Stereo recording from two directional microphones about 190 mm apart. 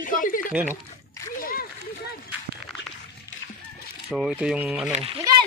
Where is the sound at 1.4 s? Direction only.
50° left (ahead or behind).